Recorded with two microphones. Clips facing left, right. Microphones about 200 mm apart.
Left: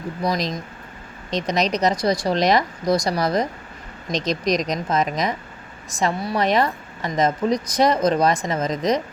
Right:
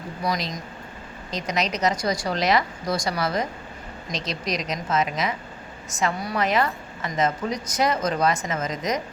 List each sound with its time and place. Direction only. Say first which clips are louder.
1.3 s a woman's voice: left 5 dB; 35° left (ahead or behind)